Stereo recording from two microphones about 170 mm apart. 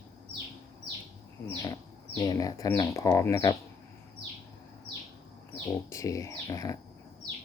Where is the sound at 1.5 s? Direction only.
20° left (ahead or behind).